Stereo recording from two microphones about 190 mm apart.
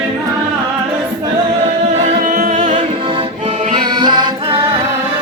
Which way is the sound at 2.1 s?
45° right (ahead or behind).